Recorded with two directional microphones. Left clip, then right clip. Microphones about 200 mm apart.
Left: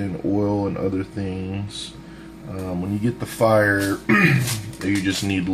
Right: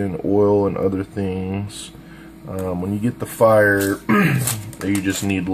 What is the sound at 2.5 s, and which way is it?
Speech, 20° right (ahead or behind).